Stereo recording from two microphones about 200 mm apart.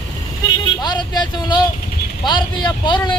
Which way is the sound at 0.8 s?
20° left (ahead or behind).